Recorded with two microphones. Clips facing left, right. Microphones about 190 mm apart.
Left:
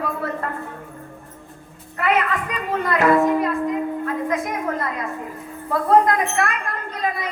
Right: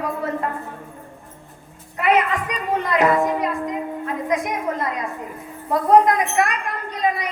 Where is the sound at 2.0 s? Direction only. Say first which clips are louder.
Right 2 dB; 20° right (ahead or behind).